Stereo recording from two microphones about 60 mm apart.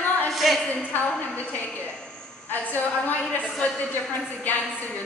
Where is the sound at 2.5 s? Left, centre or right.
Left.